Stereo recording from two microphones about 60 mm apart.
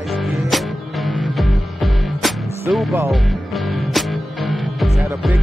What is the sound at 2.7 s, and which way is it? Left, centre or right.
Speech, right.